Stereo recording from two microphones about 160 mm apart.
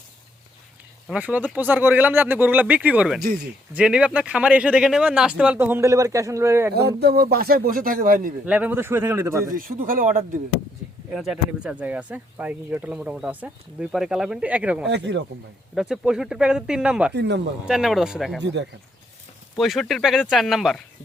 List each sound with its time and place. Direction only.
1.0 s speech: 5° right (ahead or behind)
6.7 s speech: 90° right; by 8.3 s 60° right (ahead or behind)
8.4 s speech: 10° right (ahead or behind)
9.6 s speech: 60° right (ahead or behind)
11.1 s speech: 5° right (ahead or behind)
14.8 s speech: 90° right
15.7 s speech: 5° right (ahead or behind)
17.2 s speech: 90° right
17.7 s speech: 5° right (ahead or behind)
19.5 s speech: centre (ahead or behind)